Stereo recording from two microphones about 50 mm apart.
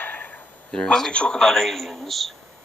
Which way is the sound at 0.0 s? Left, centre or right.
Left.